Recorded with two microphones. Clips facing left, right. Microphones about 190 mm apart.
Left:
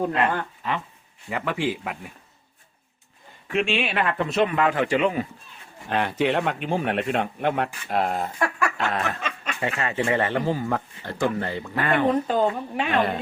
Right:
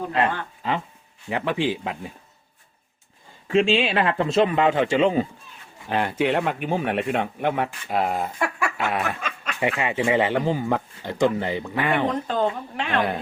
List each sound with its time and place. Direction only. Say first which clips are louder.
1.3 s a man's voice: right 2 dB; 20° right (ahead or behind)
3.5 s a man's voice: right 5 dB; 30° right (ahead or behind)
5.9 s speech: right 1 dB; 10° right (ahead or behind)
9.2 s snicker: left 1 dB; centre (ahead or behind)
9.6 s speech: right 3 dB; 15° right (ahead or behind)
12.1 s speech: left 2 dB; 10° left (ahead or behind)